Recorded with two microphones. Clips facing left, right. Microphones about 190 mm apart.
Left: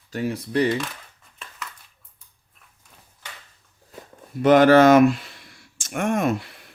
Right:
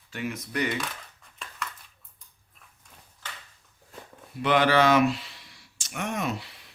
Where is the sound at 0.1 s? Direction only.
35° left (ahead or behind).